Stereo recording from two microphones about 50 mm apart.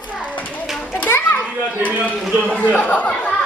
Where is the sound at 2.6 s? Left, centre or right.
Left.